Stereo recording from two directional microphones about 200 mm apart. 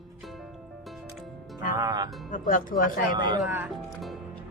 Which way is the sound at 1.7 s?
20° right (ahead or behind).